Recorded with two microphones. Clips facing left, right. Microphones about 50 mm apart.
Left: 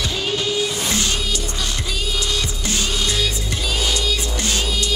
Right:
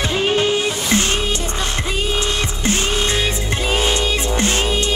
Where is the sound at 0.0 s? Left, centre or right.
Right.